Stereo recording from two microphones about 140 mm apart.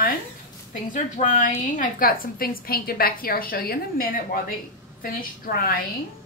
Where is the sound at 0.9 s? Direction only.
65° left (ahead or behind); by 5.8 s 90° left.